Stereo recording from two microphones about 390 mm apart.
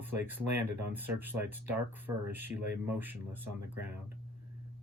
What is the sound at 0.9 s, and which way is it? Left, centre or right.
Speech, centre.